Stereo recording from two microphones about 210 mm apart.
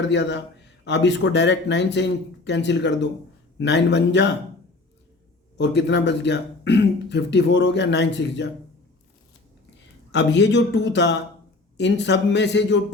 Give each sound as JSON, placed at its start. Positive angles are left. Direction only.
{"t": 0.1, "sound": "speech", "side_deg": 55}
{"t": 5.5, "sound": "speech", "side_deg": 55}
{"t": 10.1, "sound": "speech", "side_deg": 55}